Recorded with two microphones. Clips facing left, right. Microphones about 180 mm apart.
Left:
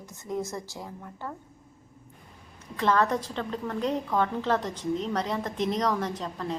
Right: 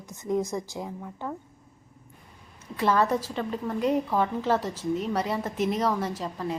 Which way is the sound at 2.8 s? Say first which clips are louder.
Right 1 dB; 10° right (ahead or behind).